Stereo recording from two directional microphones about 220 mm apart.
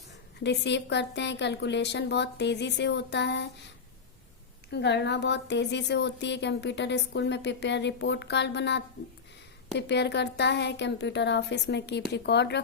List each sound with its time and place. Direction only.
0.3 s a woman's voice: 50° left (ahead or behind)
4.7 s a woman's voice: 50° left (ahead or behind)